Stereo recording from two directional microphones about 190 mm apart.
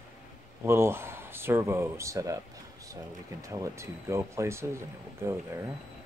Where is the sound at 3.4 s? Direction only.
15° right (ahead or behind).